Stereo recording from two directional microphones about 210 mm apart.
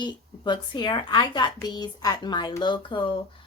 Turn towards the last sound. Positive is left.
turn(degrees=25)  # may be behind; listen again after turning